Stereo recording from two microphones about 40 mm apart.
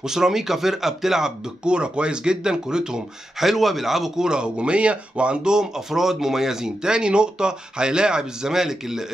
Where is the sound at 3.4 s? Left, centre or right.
Centre.